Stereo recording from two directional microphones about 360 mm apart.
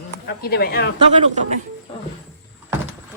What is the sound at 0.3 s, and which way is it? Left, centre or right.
Speech, left.